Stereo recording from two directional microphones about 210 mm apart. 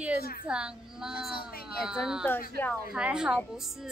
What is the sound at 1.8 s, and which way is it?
Speech, 5° right (ahead or behind).